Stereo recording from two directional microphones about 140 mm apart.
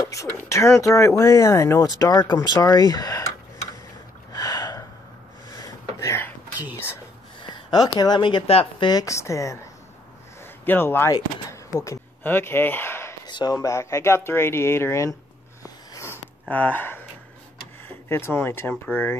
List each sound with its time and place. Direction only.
0.0 s speech: 25° left (ahead or behind)
4.3 s gasp: 25° left (ahead or behind)
5.5 s a sound: 25° left (ahead or behind)
7.4 s speech: 30° left (ahead or behind)
8.5 s speech: 45° left (ahead or behind)
8.8 s a man's voice: 25° left (ahead or behind)
13.3 s speech: 30° left (ahead or behind)
15.9 s a sound: 20° left (ahead or behind)
17.8 s speech: 15° left (ahead or behind)